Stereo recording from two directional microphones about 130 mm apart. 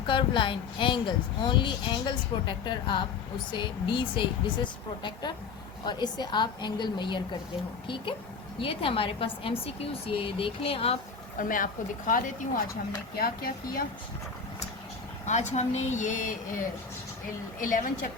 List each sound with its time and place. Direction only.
0.0 s speech: 40° left (ahead or behind)
8.5 s a woman's voice: 45° left (ahead or behind)
11.3 s a woman's voice: 90° left
15.3 s a woman's voice: 65° left (ahead or behind); by 18.1 s 90° left